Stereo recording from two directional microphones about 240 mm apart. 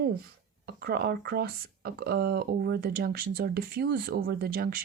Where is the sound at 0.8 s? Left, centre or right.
Right.